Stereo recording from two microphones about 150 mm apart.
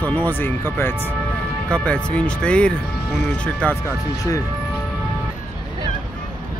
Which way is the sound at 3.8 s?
20° left (ahead or behind).